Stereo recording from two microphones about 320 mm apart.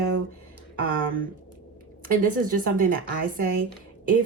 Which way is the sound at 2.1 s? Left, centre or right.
Right.